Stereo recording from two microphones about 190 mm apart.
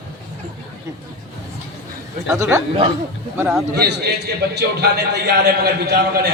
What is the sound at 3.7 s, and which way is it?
A man's voice, 60° right (ahead or behind).